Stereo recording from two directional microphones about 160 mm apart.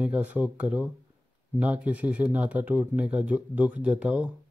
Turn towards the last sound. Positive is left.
turn(degrees=-10)  # may be behind; listen again after turning